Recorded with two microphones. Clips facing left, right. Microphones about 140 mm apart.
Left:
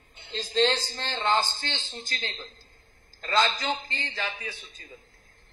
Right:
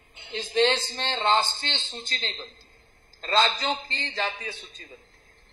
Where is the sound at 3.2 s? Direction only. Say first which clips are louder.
Right 1 dB; 30° right (ahead or behind).